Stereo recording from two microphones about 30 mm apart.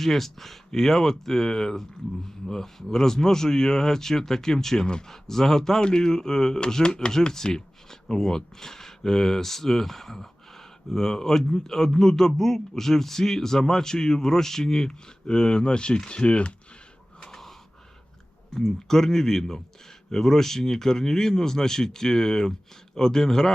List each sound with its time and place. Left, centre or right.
0.0 s a man's voice: centre; by 7.1 s left
7.1 s a man's voice: centre; by 16.6 s left
18.6 s speech: centre